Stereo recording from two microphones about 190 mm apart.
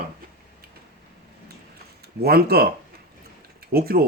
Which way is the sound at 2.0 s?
55° right (ahead or behind).